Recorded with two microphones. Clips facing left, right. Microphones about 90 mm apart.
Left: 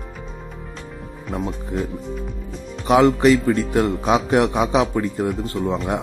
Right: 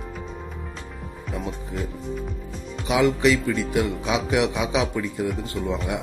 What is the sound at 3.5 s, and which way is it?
Speech, 40° left (ahead or behind).